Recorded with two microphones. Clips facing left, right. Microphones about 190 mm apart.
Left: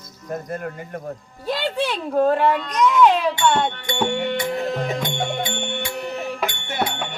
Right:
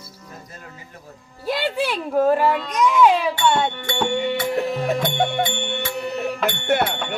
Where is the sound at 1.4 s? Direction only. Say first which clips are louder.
Right 1 dB; 5° right (ahead or behind).